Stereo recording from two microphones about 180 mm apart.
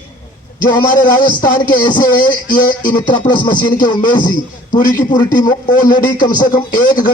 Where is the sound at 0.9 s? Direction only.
45° left (ahead or behind).